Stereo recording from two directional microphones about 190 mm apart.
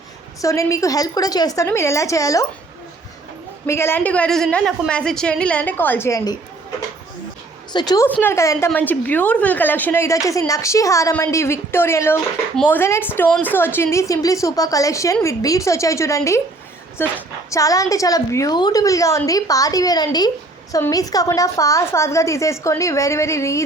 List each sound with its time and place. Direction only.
0.4 s a woman's voice: 15° left (ahead or behind)
3.7 s a woman's voice: 15° left (ahead or behind)
7.7 s a woman's voice: 20° left (ahead or behind)